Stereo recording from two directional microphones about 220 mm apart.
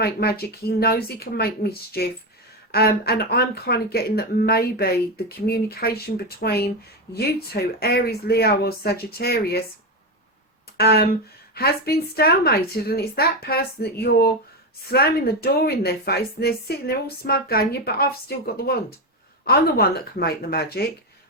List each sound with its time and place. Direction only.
0.0 s a woman's voice: 45° left (ahead or behind)
10.8 s a woman's voice: 45° left (ahead or behind)